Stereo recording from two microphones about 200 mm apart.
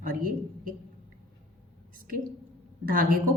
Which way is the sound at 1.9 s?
45° right (ahead or behind).